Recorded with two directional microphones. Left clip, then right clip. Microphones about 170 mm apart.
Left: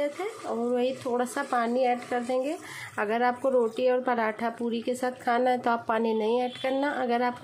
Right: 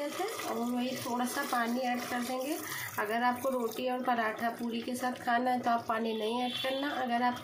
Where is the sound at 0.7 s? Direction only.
50° left (ahead or behind).